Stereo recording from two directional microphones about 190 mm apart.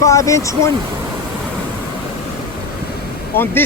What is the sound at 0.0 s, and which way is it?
Speech, 15° left (ahead or behind).